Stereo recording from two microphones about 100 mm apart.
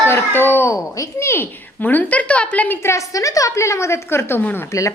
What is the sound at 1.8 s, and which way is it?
A woman's voice, 15° left (ahead or behind).